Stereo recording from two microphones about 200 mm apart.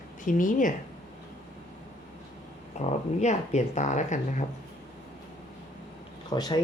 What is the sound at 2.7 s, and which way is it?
Speech, 35° left (ahead or behind).